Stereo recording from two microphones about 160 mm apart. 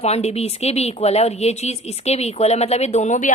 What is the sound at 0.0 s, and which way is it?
A woman's voice, 40° left (ahead or behind).